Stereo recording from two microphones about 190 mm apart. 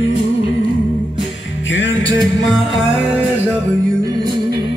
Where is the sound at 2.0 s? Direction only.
Centre (ahead or behind).